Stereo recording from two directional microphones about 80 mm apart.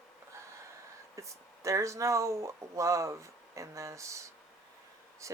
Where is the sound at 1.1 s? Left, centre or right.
Right.